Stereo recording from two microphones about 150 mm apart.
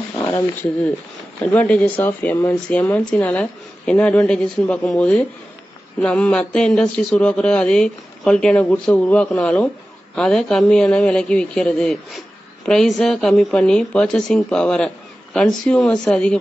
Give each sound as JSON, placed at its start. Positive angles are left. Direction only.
{"t": 0.2, "sound": "a woman's voice", "side_deg": 15}